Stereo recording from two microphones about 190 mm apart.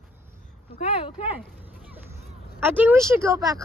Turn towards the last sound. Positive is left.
turn(degrees=-15)  # may be behind; listen again after turning